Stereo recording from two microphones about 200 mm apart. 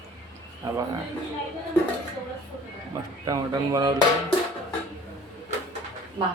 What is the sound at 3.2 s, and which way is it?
Speech, 20° right (ahead or behind).